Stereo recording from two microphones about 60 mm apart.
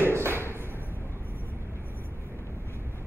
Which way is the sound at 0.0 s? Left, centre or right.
Right.